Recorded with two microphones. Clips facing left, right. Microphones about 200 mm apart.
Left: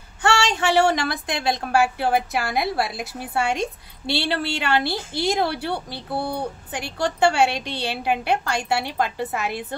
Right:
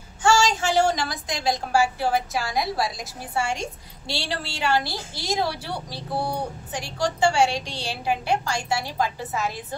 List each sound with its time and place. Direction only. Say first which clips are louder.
0.2 s a woman's voice: right 1 dB; 65° left (ahead or behind)